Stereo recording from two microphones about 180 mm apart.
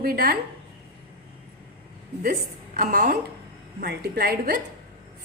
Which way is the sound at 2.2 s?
45° right (ahead or behind).